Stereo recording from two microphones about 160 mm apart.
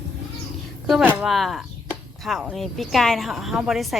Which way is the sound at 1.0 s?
5° right (ahead or behind).